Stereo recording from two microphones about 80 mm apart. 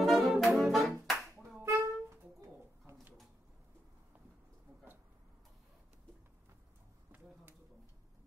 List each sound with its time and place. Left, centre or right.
0.0 s brass instrument: centre
1.0 s music: centre
1.6 s music: right
2.9 s a sound: right